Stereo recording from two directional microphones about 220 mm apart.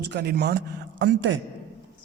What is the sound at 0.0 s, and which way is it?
Speech, 50° right (ahead or behind).